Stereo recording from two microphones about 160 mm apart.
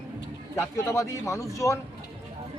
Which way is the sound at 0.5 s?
15° left (ahead or behind).